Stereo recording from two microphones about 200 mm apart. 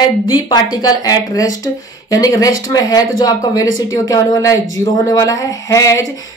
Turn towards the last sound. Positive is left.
turn(degrees=15)  # may be behind; listen again after turning